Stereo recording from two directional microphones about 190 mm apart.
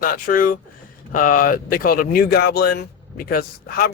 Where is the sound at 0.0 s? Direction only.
45° left (ahead or behind).